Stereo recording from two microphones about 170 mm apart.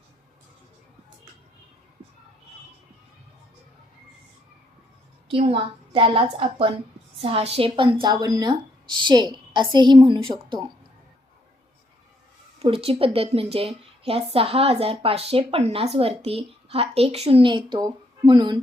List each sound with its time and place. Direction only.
5.3 s a woman's voice: 30° right (ahead or behind)
12.5 s a woman's voice: 35° right (ahead or behind)